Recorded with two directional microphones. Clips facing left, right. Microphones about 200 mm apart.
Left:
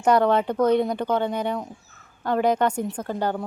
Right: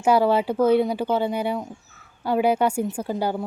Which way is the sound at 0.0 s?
5° right (ahead or behind).